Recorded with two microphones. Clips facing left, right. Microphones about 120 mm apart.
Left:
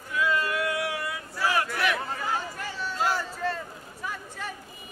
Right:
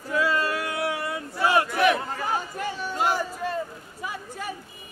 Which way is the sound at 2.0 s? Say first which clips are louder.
Right 2 dB; centre (ahead or behind).